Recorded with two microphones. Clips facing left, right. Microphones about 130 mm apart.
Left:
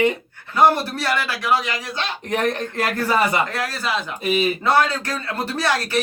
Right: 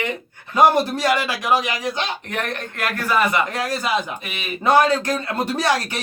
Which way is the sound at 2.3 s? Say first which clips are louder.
Left 5 dB; 35° left (ahead or behind).